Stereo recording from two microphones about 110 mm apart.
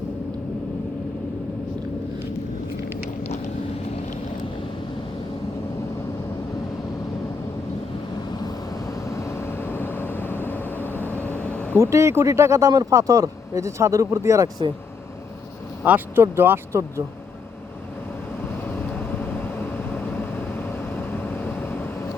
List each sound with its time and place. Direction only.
9.0 s vehicle: 25° left (ahead or behind)
11.8 s speech: 25° right (ahead or behind)
15.8 s speech: 20° right (ahead or behind)
18.6 s vehicle: 15° left (ahead or behind)